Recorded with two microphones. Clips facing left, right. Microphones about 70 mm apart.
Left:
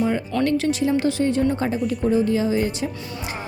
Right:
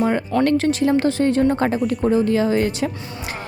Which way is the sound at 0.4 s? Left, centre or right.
Right.